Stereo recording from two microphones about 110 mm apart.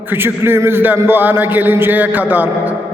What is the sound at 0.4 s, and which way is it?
A man's voice, 20° right (ahead or behind).